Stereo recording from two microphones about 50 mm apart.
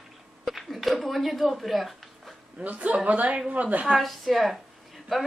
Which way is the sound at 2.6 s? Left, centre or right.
Right.